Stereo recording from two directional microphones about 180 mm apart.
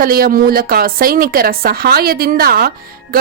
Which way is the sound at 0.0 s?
55° right (ahead or behind).